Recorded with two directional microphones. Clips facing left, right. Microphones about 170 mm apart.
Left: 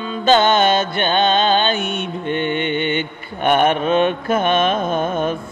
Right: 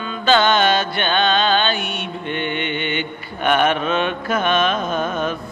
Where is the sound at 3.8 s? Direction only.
50° left (ahead or behind).